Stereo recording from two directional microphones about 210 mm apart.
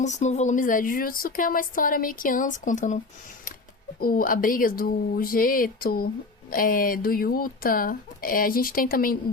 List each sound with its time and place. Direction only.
0.0 s speech: 35° left (ahead or behind)
4.0 s speech: 45° left (ahead or behind)